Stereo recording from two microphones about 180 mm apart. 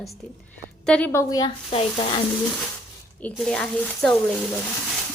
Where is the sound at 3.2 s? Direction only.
5° left (ahead or behind).